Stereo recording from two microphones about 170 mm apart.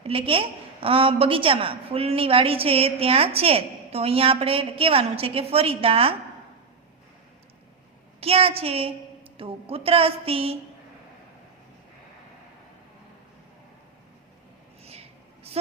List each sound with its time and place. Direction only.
0.0 s a woman's voice: 35° right (ahead or behind)
8.2 s a woman's voice: 35° right (ahead or behind)
14.8 s a sound: 35° right (ahead or behind)